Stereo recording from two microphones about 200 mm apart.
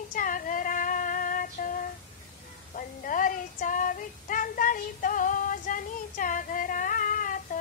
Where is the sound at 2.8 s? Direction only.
40° left (ahead or behind).